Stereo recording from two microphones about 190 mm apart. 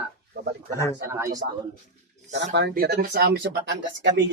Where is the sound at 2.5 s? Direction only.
60° right (ahead or behind).